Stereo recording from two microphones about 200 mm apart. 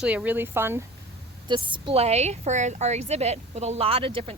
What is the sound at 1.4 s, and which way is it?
A woman's voice, 25° right (ahead or behind).